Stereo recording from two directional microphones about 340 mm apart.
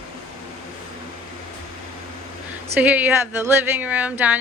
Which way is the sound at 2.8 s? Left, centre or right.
Centre.